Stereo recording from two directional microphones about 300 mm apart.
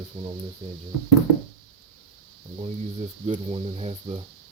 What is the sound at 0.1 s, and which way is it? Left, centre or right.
Speech, centre.